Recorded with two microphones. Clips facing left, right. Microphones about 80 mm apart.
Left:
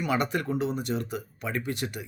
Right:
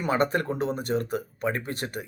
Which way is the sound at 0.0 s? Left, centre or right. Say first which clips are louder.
Right 3 dB; right.